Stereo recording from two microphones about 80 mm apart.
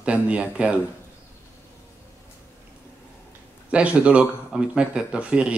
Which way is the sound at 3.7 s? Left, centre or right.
Centre.